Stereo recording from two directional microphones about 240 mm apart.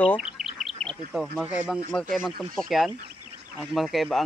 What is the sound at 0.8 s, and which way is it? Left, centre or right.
Speech, centre.